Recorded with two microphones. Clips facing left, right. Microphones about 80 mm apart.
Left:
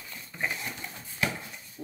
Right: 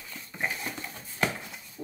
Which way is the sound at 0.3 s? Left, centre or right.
Centre.